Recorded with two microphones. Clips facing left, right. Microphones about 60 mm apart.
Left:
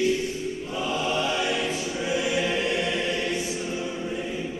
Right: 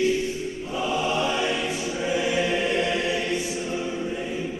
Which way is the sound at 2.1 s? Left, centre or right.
Right.